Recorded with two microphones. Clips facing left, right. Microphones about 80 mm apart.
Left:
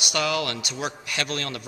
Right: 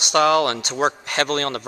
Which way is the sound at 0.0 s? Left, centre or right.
Right.